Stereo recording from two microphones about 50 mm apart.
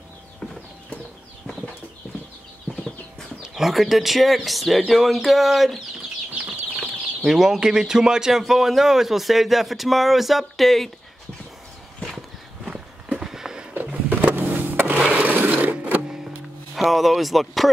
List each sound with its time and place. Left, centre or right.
2.7 s clip-clop: centre
3.5 s a man's voice: centre
7.2 s a man's voice: centre
12.6 s walk: centre
13.8 s a sound: right
15.0 s a sound: right
15.2 s a sound: right
15.6 s music: right
16.7 s speech: centre